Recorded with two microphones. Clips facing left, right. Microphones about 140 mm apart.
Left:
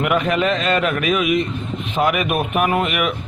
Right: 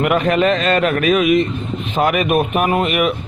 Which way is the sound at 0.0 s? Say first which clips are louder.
Right 3 dB; 45° right (ahead or behind).